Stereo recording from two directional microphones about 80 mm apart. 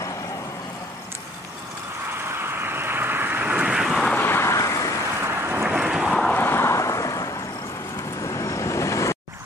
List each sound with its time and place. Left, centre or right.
2.0 s vehicle: right; by 4.1 s centre
4.1 s vehicle: left
5.2 s thunder: right
5.7 s vehicle: centre
6.3 s vehicle: left